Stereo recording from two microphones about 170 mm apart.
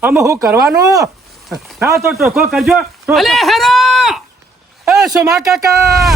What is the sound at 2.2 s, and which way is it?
Speech, 5° right (ahead or behind).